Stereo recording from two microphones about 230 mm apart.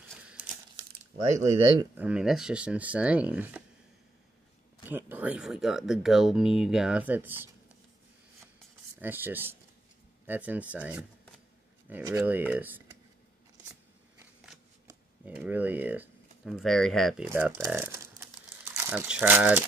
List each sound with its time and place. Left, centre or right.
0.2 s crumpling: centre
1.3 s speech: right
2.0 s speech: centre
4.8 s speech: centre
9.0 s speech: centre
15.2 s speech: centre
17.3 s speech: centre